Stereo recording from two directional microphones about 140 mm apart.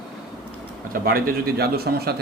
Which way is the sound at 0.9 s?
90° right.